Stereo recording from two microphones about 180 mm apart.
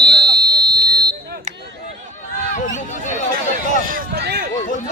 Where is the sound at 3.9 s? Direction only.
55° right (ahead or behind).